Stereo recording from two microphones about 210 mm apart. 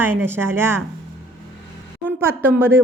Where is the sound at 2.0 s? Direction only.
10° right (ahead or behind).